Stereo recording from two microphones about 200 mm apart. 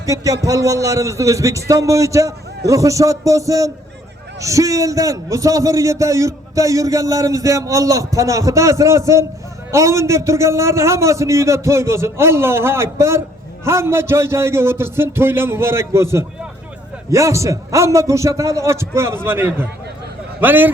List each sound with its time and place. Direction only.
0.0 s a man's voice: 15° right (ahead or behind)
17.1 s a man's voice: 15° right (ahead or behind)